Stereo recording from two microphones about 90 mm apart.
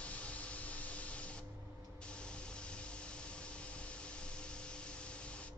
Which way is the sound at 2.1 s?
10° left (ahead or behind).